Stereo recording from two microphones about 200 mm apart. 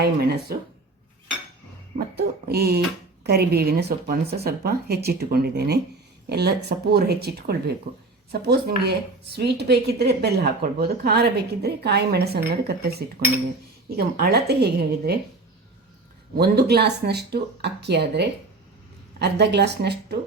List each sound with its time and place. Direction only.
0.0 s speech: 55° right (ahead or behind)
2.1 s speech: 50° right (ahead or behind)
16.3 s speech: 50° right (ahead or behind)